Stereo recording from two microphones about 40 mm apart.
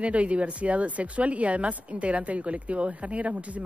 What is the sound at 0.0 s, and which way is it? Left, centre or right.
A man's voice, right.